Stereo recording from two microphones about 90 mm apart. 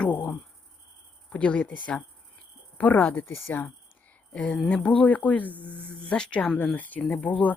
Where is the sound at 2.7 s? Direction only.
20° left (ahead or behind).